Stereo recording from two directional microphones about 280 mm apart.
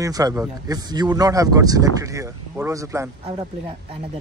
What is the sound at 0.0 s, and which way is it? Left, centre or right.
Speech, centre.